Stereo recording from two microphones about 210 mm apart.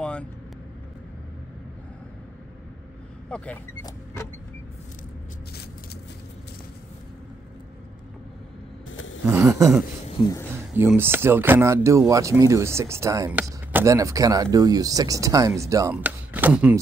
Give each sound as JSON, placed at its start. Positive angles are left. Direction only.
{"t": 0.0, "sound": "vehicle", "side_deg": 5}
{"t": 3.3, "sound": "speech", "side_deg": 5}
{"t": 3.8, "sound": "a sound", "side_deg": 15}
{"t": 8.9, "sound": "a sound", "side_deg": 65}
{"t": 9.2, "sound": "speech", "side_deg": -10}
{"t": 10.8, "sound": "speech", "side_deg": -10}